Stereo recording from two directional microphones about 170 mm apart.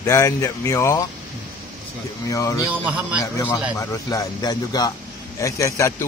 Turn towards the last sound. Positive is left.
turn(degrees=15)  # may be behind; listen again after turning